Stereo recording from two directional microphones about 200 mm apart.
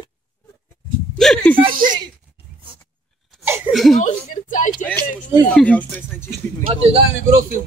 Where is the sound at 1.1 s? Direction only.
Centre (ahead or behind).